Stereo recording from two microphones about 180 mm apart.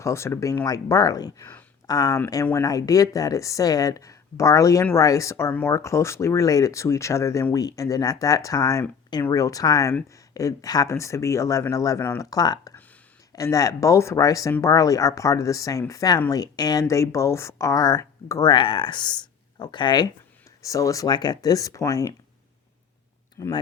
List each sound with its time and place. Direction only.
0.0 s speech: 15° left (ahead or behind)
23.4 s speech: 15° left (ahead or behind)